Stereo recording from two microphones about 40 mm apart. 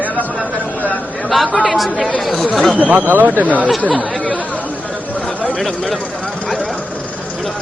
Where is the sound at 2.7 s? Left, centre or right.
Right.